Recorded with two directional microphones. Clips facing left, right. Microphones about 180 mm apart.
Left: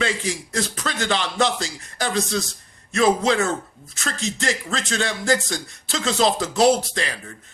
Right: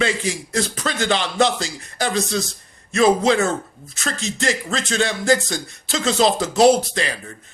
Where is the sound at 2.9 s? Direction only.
25° right (ahead or behind).